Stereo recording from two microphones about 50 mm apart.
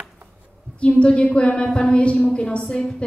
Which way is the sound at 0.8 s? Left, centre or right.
Left.